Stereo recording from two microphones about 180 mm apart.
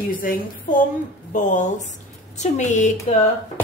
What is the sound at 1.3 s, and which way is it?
A woman's voice, 45° left (ahead or behind).